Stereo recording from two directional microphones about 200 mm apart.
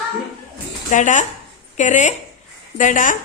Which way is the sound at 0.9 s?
40° left (ahead or behind).